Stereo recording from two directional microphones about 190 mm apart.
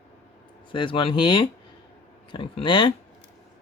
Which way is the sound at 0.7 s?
25° left (ahead or behind).